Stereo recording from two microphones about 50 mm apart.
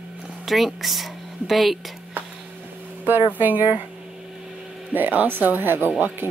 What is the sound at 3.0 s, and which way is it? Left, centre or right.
Speech, right.